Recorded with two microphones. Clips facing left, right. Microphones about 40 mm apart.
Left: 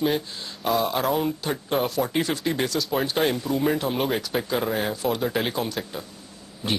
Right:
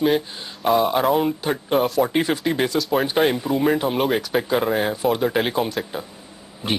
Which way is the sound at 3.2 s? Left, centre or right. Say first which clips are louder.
Right 4 dB; centre.